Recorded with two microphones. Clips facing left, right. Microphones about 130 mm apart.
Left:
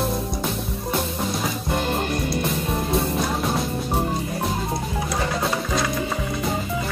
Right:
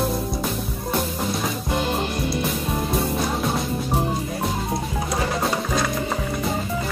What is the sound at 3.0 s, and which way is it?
Music, centre (ahead or behind).